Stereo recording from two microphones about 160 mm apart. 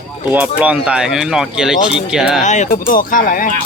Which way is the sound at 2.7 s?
60° left (ahead or behind).